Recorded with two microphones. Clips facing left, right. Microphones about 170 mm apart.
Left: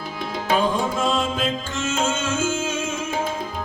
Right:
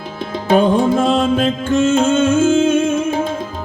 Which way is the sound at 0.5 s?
60° right (ahead or behind).